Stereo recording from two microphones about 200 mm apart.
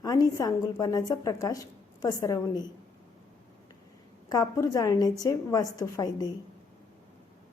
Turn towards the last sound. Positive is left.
turn(degrees=20)  # may be behind; listen again after turning